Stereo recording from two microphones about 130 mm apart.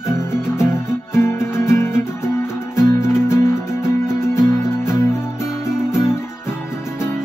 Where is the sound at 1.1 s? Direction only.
20° left (ahead or behind).